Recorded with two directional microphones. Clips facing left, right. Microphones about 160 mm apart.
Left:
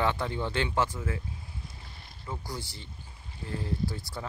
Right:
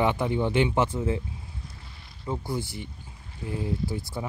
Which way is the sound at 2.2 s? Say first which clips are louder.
Right 8 dB; 25° right (ahead or behind).